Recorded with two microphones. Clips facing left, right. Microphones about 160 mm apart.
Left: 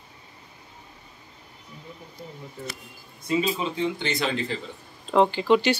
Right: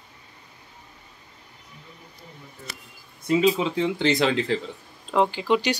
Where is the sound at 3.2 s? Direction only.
90° right.